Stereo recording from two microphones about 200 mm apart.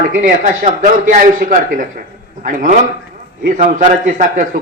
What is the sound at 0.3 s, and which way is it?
A man's voice, 40° right (ahead or behind).